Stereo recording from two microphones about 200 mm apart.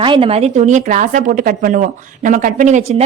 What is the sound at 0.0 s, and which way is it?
A woman's voice, 25° right (ahead or behind).